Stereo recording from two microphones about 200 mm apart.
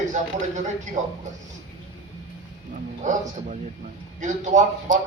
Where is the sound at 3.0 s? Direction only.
40° right (ahead or behind).